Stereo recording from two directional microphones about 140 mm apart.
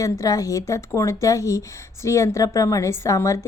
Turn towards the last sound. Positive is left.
turn(degrees=20)  # may be behind; listen again after turning